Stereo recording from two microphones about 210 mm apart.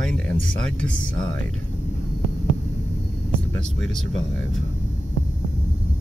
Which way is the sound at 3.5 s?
Centre (ahead or behind).